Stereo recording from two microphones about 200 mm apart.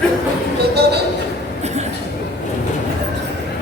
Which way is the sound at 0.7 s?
55° right (ahead or behind).